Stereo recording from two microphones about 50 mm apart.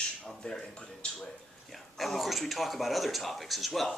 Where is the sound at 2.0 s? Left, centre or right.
Centre.